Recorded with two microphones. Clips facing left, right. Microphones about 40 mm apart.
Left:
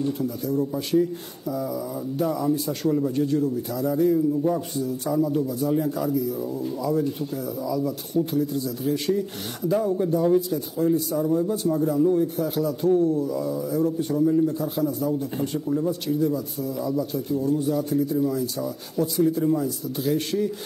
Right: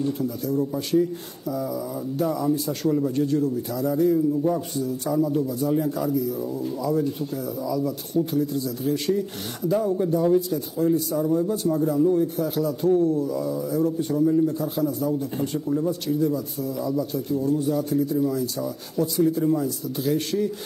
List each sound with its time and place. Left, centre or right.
0.0 s a man's voice: centre